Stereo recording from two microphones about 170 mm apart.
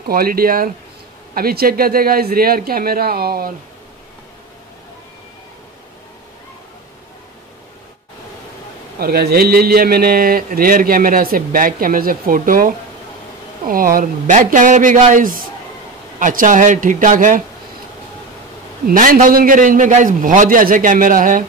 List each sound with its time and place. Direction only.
0.1 s a man's voice: 60° right (ahead or behind)
9.0 s a man's voice: 60° right (ahead or behind)
18.9 s a man's voice: 55° right (ahead or behind)